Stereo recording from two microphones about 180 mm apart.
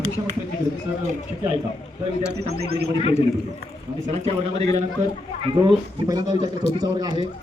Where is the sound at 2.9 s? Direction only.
35° left (ahead or behind).